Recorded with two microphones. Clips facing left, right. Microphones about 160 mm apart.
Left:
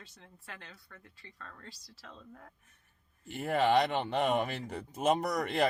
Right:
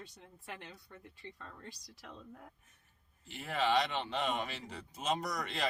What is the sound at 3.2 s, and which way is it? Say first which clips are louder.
Speech: left 5 dB; 50° left (ahead or behind).